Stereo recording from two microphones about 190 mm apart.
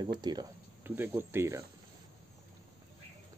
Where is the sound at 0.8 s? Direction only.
10° right (ahead or behind).